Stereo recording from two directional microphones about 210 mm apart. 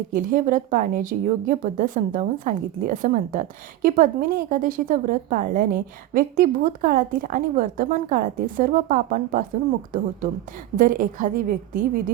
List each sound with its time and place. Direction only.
0.1 s a woman's voice: 40° right (ahead or behind)
10.8 s a woman's voice: 40° right (ahead or behind)